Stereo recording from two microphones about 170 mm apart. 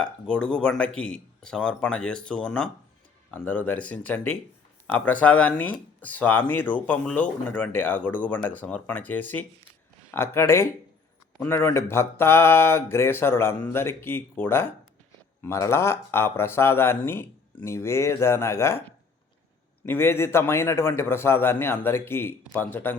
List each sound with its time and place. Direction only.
0.0 s speech: 5° left (ahead or behind)